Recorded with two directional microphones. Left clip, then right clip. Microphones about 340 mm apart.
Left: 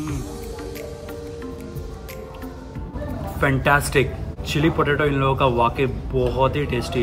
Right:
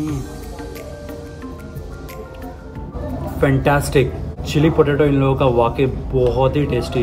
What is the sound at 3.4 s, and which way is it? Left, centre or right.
Speech, centre.